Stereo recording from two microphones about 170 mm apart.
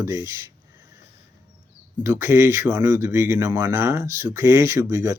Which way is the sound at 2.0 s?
15° right (ahead or behind).